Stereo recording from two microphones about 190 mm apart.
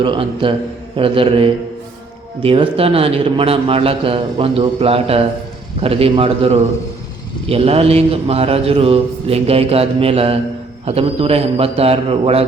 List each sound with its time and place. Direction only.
0.0 s a man's voice: 25° right (ahead or behind)